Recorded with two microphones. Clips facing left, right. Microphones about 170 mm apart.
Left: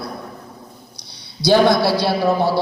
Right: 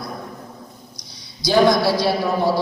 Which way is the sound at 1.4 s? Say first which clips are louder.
Left 2 dB; 65° left (ahead or behind).